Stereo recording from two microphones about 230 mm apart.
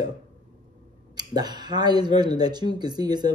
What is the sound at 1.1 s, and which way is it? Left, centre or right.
A woman's voice, centre.